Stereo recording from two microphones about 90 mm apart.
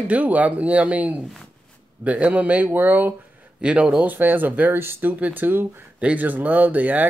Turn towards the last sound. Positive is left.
turn(degrees=-20)  # may be behind; listen again after turning